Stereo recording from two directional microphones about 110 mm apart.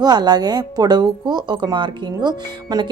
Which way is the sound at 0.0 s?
40° right (ahead or behind).